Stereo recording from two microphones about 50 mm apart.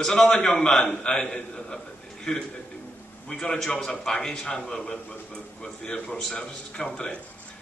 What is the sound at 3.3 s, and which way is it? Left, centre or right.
A man's voice, centre.